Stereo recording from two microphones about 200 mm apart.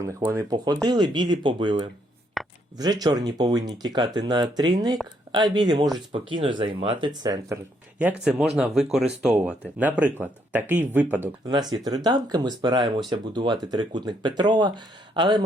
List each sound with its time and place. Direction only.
0.3 s speech: 20° right (ahead or behind)
2.4 s a sound: centre (ahead or behind)
2.7 s speech: 20° right (ahead or behind)
7.9 s speech: 5° right (ahead or behind)
11.7 s speech: 20° right (ahead or behind)